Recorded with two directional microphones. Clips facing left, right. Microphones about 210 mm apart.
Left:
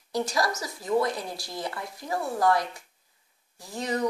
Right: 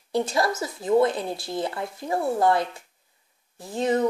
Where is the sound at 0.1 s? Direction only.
25° right (ahead or behind).